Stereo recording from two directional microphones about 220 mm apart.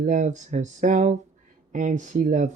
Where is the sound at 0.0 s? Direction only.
35° right (ahead or behind).